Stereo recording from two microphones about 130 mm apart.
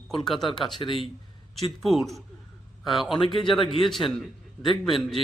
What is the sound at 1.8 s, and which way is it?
Speech, centre (ahead or behind).